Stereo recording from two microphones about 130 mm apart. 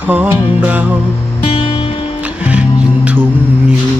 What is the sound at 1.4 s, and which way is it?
Music, 40° left (ahead or behind).